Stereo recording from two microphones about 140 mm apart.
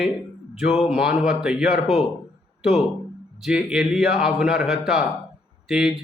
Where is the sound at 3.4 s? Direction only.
5° right (ahead or behind).